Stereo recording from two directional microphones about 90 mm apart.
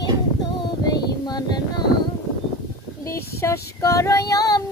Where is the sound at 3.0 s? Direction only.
30° left (ahead or behind).